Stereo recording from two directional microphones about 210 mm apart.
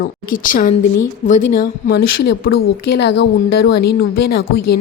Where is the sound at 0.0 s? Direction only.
40° left (ahead or behind).